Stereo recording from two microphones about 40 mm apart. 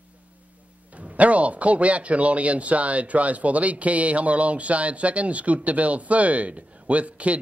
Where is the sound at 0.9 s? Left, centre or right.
Right.